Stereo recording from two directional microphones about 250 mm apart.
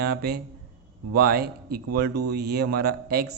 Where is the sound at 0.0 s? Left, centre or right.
Right.